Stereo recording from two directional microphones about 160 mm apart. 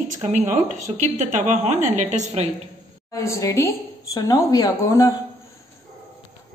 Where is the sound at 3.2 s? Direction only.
20° left (ahead or behind).